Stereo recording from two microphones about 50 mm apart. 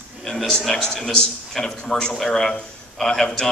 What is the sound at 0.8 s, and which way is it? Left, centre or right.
A man's voice, centre.